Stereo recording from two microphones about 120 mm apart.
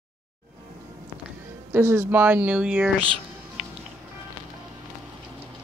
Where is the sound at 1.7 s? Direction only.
20° right (ahead or behind).